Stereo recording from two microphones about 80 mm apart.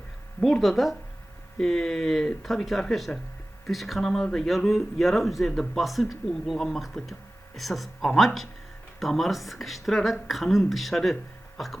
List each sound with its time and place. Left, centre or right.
0.4 s speech: centre